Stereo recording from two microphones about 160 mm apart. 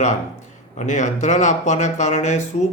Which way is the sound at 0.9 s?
50° left (ahead or behind).